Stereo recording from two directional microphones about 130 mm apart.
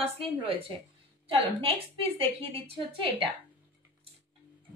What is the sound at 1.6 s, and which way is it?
Speech, 45° right (ahead or behind).